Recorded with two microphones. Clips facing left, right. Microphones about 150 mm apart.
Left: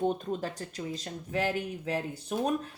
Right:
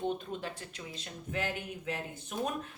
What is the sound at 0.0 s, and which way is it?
A woman's voice, 40° left (ahead or behind).